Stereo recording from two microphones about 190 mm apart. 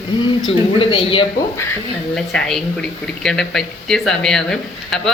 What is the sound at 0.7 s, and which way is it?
Speech, 30° left (ahead or behind).